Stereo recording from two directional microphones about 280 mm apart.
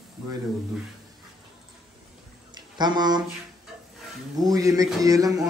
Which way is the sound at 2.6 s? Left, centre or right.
Centre.